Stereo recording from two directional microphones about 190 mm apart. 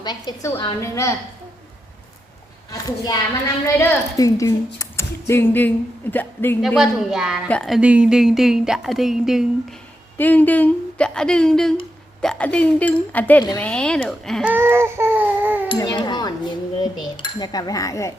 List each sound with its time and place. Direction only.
0.0 s a woman's voice: 20° left (ahead or behind)
2.8 s a woman's voice: 20° left (ahead or behind)
6.6 s a woman's voice: centre (ahead or behind)
10.2 s a woman's voice: 10° left (ahead or behind)
14.5 s baby cry: 10° right (ahead or behind)
15.7 s speech: 20° left (ahead or behind)